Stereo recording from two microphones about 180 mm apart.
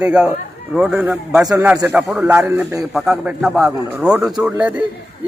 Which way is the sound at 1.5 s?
20° right (ahead or behind).